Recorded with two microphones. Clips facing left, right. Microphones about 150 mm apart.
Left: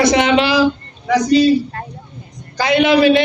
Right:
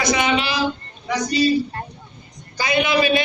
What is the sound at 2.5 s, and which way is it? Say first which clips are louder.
Speech: left 7 dB; 85° left.